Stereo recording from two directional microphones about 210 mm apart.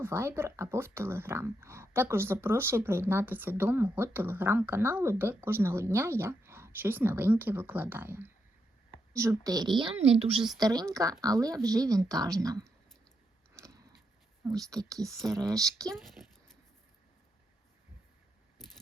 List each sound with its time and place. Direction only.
0.0 s speech: 10° right (ahead or behind)
9.4 s a child's voice: 20° right (ahead or behind)
10.6 s speech: 20° right (ahead or behind)
14.4 s speech: 15° right (ahead or behind)